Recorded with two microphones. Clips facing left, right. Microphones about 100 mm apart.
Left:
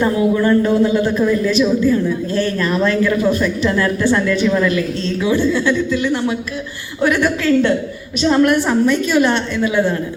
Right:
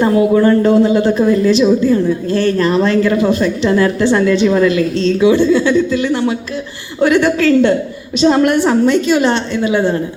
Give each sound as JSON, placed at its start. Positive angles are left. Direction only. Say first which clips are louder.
{"t": 0.0, "sound": "a woman's voice", "louder": "right 5 dB", "side_deg": -30}